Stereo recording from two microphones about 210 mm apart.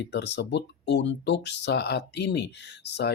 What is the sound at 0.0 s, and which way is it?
Speech, 55° left (ahead or behind).